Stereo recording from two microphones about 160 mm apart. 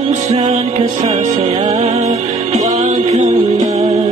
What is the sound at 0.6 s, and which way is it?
Music, 35° right (ahead or behind).